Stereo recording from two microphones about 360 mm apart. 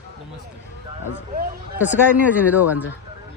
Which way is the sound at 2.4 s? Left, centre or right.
Centre.